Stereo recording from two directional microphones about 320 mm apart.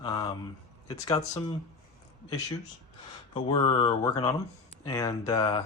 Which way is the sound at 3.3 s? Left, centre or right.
Centre.